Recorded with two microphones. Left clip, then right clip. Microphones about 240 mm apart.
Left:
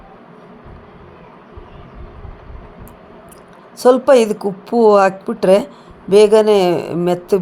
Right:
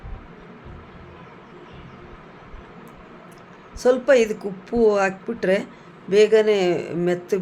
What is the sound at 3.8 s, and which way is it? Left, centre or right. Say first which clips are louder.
Speech: left 6 dB; centre.